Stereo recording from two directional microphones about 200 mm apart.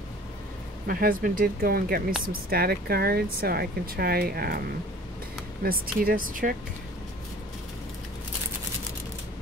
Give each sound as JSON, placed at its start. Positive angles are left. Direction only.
{"t": 0.8, "sound": "speech", "side_deg": -45}
{"t": 5.6, "sound": "speech", "side_deg": -45}